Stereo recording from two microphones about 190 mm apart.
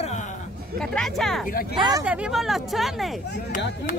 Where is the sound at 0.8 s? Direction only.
Centre (ahead or behind).